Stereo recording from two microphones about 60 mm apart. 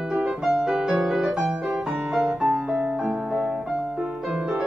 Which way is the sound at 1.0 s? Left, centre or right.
Centre.